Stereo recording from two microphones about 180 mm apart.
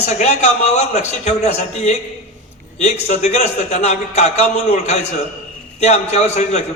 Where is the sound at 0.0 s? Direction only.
40° left (ahead or behind).